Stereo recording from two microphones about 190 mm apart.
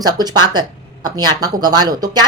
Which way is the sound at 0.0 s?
20° right (ahead or behind).